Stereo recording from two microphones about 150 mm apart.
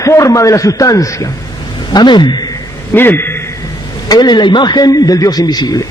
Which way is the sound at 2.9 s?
15° left (ahead or behind).